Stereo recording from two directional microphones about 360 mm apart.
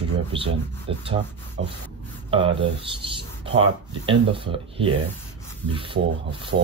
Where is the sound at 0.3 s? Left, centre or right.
Centre.